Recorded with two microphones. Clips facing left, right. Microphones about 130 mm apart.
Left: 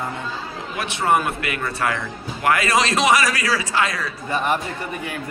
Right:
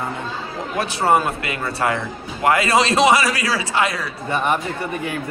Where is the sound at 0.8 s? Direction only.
35° right (ahead or behind).